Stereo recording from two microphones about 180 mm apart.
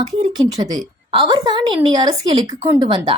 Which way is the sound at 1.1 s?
25° right (ahead or behind).